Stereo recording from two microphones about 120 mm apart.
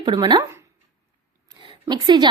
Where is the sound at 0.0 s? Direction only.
40° right (ahead or behind).